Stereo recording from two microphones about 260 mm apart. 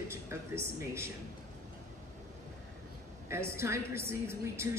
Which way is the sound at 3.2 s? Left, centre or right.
Centre.